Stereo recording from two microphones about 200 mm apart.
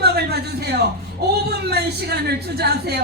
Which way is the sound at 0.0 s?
55° right (ahead or behind).